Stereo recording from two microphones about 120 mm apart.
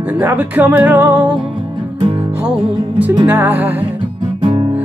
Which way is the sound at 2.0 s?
55° right (ahead or behind).